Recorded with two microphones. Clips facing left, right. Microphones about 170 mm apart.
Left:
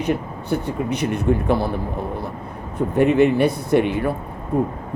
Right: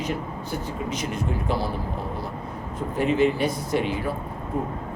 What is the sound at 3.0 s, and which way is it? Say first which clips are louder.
Speech: left 6 dB; 60° left (ahead or behind).